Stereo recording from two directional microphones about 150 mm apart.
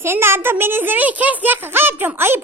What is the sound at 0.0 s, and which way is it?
A child's voice, 15° right (ahead or behind).